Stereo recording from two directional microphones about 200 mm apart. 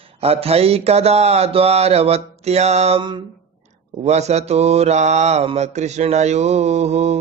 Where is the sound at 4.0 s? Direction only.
35° right (ahead or behind).